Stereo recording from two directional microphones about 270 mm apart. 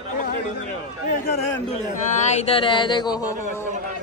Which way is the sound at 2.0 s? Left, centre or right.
Left.